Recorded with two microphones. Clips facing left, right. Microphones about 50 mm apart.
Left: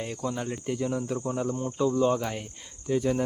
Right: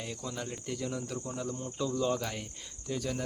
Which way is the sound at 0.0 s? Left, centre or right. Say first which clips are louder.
Left 7 dB; left.